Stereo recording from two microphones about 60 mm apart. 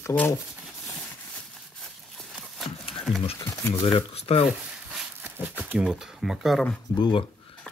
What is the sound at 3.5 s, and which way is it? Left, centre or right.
Speech, left.